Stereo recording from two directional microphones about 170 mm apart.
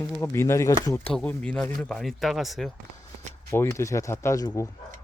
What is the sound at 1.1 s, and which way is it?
Speech, 5° left (ahead or behind).